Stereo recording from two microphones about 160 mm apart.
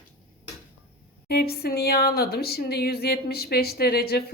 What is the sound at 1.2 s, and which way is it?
A woman's voice, 75° left (ahead or behind).